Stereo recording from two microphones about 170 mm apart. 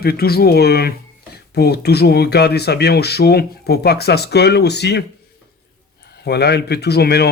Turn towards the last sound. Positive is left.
turn(degrees=70)  # may be behind; listen again after turning